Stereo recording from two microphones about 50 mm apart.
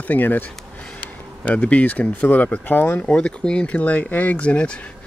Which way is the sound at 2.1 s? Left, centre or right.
Left.